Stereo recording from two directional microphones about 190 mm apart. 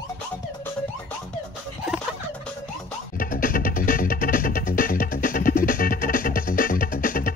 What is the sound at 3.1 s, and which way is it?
Music, 50° left (ahead or behind).